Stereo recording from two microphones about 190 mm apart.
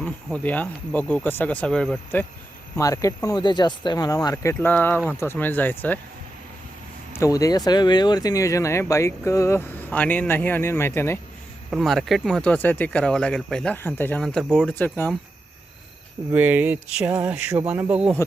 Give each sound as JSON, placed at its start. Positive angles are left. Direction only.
{"t": 0.3, "sound": "speech", "side_deg": 5}
{"t": 2.7, "sound": "speech", "side_deg": 15}
{"t": 7.2, "sound": "speech", "side_deg": 15}
{"t": 11.7, "sound": "speech", "side_deg": 0}
{"t": 16.3, "sound": "speech", "side_deg": -10}